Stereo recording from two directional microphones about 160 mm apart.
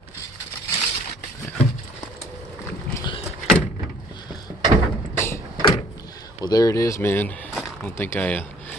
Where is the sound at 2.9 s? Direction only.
30° left (ahead or behind).